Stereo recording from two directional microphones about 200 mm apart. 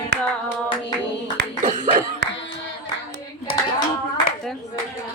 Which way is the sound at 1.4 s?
55° right (ahead or behind).